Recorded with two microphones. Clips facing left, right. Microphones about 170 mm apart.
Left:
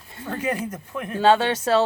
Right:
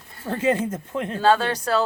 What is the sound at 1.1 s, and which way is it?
Speech, 25° left (ahead or behind).